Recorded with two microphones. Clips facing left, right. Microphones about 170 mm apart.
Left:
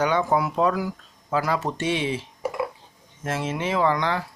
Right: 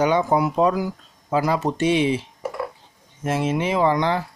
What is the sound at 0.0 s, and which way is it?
Speech, 15° right (ahead or behind).